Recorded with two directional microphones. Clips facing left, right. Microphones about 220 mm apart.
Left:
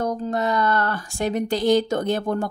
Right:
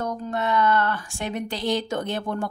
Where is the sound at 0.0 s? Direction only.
35° left (ahead or behind).